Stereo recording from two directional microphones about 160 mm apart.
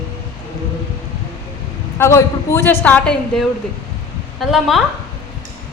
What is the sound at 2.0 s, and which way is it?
A woman's voice, 15° left (ahead or behind).